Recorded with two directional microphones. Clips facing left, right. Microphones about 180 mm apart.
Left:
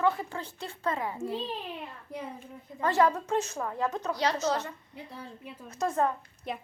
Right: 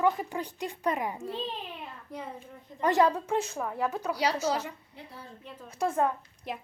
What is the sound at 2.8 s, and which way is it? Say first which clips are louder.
Speech: right 1 dB; 15° right (ahead or behind).